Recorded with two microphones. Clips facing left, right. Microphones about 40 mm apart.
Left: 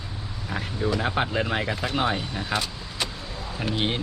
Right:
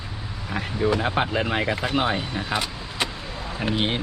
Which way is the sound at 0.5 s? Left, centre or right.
Right.